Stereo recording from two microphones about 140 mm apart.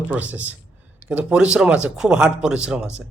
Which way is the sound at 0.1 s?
10° right (ahead or behind).